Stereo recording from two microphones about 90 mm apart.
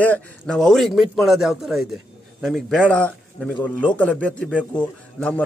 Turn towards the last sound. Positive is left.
turn(degrees=15)  # may be behind; listen again after turning